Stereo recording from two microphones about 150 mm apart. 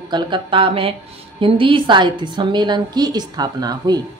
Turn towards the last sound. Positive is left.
turn(degrees=-25)  # may be behind; listen again after turning